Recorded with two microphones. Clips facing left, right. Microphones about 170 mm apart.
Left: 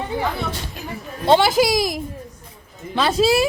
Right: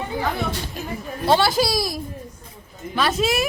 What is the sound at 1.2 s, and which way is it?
Speech, 20° left (ahead or behind).